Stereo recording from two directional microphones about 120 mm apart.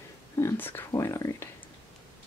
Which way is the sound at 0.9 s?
25° left (ahead or behind).